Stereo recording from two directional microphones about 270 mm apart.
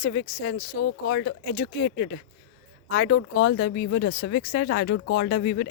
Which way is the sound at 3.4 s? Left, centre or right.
Left.